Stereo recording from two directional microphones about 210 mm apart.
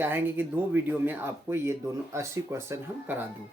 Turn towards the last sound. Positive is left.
turn(degrees=-10)  # may be behind; listen again after turning